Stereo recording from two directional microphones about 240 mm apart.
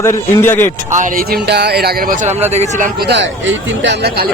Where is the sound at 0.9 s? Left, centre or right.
Right.